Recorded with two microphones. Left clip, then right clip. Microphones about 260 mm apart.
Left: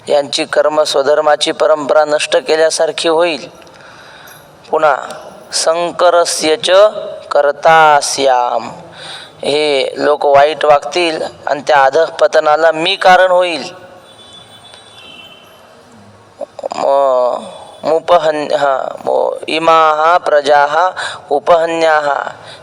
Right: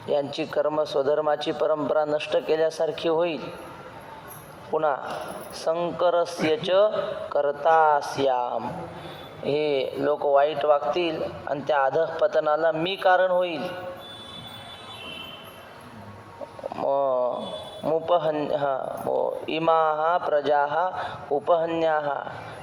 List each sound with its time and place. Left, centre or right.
0.0 s a man's voice: left
4.7 s a man's voice: left
16.6 s a sound: left
17.8 s a man's voice: left